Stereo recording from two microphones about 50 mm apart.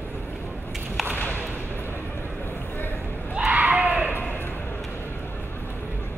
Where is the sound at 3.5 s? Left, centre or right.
Right.